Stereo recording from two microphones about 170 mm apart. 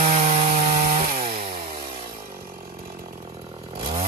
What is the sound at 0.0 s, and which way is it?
Wood, 40° right (ahead or behind).